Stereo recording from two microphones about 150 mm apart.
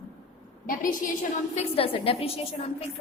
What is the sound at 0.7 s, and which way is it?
Speech, 65° left (ahead or behind).